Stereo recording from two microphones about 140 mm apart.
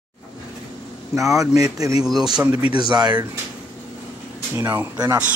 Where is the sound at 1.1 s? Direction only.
20° right (ahead or behind).